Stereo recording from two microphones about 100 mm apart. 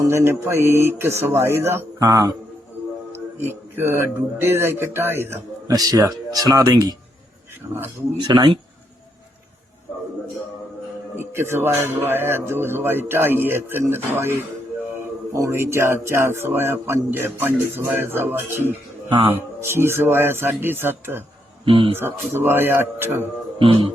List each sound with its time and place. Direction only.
0.0 s a man's voice: 30° right (ahead or behind)
2.0 s speech: 40° right (ahead or behind)
3.1 s speech: 20° right (ahead or behind)
5.6 s speech: 40° right (ahead or behind)
8.2 s speech: 50° right (ahead or behind)
11.2 s a man's voice: 25° right (ahead or behind)
19.6 s a man's voice: 25° right (ahead or behind)
21.6 s speech: 65° right (ahead or behind)
21.9 s a man's voice: 20° right (ahead or behind)
23.6 s speech: 65° right (ahead or behind)